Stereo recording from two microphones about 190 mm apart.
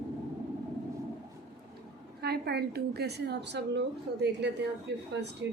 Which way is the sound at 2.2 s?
55° right (ahead or behind).